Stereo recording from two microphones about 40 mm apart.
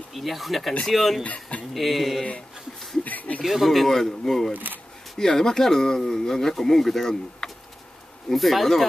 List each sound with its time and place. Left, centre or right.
0.1 s speech: centre
1.2 s speech: left
1.7 s speech: centre
3.0 s a sound: left
3.4 s speech: centre
7.4 s a sound: centre
8.3 s speech: centre